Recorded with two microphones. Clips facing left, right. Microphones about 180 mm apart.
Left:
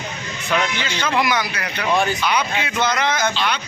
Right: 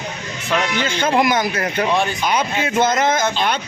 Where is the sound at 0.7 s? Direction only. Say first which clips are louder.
Right 4 dB; 50° right (ahead or behind).